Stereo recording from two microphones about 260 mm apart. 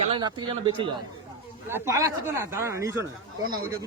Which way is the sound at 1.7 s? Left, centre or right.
Centre.